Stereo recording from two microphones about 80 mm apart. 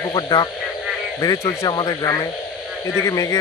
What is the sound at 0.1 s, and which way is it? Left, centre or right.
Speech, left.